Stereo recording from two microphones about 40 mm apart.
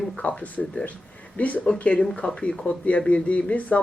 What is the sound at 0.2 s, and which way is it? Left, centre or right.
Speech, left.